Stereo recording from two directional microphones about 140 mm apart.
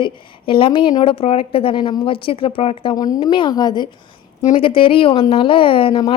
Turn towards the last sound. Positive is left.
turn(degrees=40)  # may be behind; listen again after turning